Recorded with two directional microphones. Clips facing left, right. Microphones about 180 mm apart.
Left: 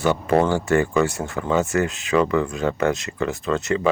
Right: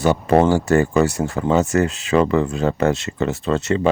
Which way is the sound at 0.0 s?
40° right (ahead or behind).